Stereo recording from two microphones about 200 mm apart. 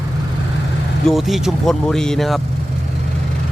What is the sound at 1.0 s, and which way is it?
Speech, centre (ahead or behind).